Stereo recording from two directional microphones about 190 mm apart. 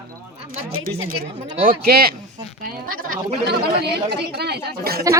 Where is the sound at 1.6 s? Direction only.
50° right (ahead or behind).